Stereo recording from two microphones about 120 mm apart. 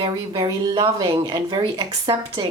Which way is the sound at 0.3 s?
30° right (ahead or behind).